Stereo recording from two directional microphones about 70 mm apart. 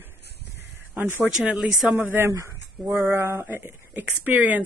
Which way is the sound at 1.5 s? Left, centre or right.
Centre.